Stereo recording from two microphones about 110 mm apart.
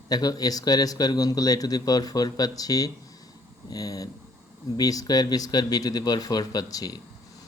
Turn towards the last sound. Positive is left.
turn(degrees=35)  # may be behind; listen again after turning